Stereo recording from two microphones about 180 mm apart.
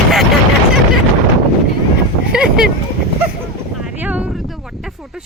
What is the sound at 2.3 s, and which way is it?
Speech, 5° right (ahead or behind).